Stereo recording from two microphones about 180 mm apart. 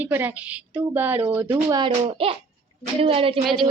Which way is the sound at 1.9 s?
30° right (ahead or behind).